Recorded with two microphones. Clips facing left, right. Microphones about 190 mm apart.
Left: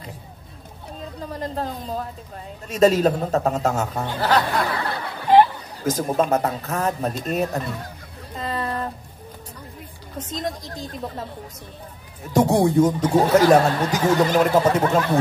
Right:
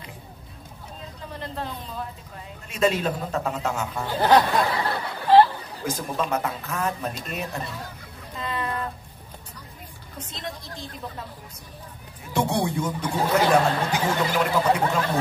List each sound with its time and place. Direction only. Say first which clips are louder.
1.3 s a man's voice: left 5 dB; 40° left (ahead or behind)
4.2 s speech: right 2 dB; 20° right (ahead or behind)
5.3 s chatter: left 1 dB; 15° left (ahead or behind)
5.9 s a man's voice: left 7 dB; 40° left (ahead or behind)
8.4 s a sound: left 3 dB; 35° left (ahead or behind)
10.1 s a man's voice: left 8 dB; 40° left (ahead or behind)
12.3 s speech: left 7 dB; 40° left (ahead or behind)